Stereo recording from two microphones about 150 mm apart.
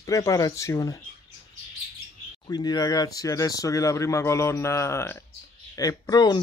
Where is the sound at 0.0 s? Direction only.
20° left (ahead or behind).